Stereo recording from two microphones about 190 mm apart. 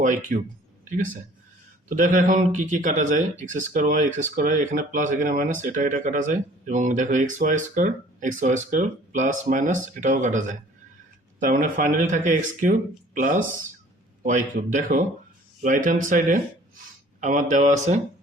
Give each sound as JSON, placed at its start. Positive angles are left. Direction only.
{"t": 0.0, "sound": "speech", "side_deg": -40}
{"t": 1.9, "sound": "speech", "side_deg": -45}